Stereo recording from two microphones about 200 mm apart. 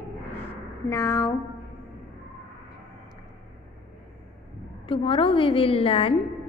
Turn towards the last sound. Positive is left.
turn(degrees=30)  # may be behind; listen again after turning